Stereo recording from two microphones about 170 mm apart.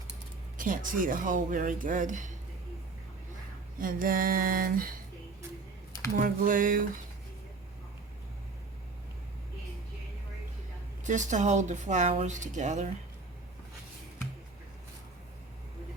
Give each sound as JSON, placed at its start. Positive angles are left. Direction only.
{"t": 0.5, "sound": "speech", "side_deg": -50}
{"t": 3.8, "sound": "a sound", "side_deg": -55}
{"t": 6.1, "sound": "speech", "side_deg": -55}
{"t": 11.0, "sound": "speech", "side_deg": -45}